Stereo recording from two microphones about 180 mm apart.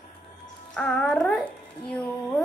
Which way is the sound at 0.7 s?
5° left (ahead or behind).